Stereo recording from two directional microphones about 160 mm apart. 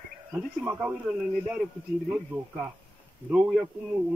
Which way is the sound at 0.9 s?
10° right (ahead or behind).